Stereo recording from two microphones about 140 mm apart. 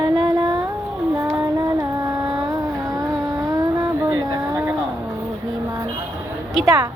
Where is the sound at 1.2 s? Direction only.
25° right (ahead or behind).